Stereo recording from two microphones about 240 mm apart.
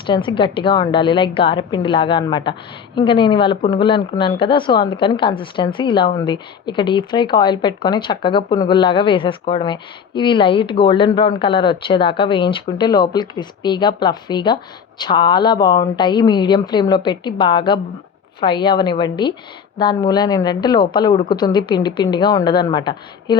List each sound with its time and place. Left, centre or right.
0.1 s a woman's voice: left